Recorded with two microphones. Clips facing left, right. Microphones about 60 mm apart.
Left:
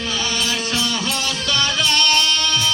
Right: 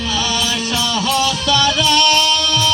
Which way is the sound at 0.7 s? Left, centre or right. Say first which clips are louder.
Right 4 dB; left.